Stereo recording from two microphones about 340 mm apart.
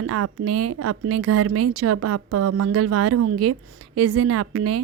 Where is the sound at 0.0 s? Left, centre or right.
Right.